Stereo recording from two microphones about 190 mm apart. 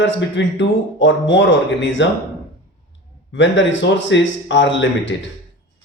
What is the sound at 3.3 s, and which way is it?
Speech, 75° left (ahead or behind).